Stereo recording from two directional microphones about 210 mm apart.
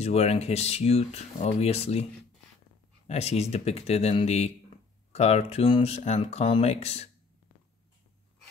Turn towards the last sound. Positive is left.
turn(degrees=30)  # may be behind; listen again after turning